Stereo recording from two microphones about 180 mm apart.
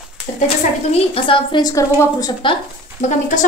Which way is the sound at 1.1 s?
30° left (ahead or behind).